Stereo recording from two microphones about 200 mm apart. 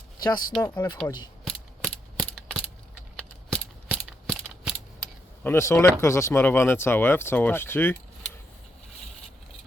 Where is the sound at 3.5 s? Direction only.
5° left (ahead or behind).